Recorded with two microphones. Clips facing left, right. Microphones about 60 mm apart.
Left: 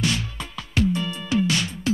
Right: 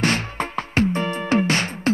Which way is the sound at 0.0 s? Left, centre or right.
Right.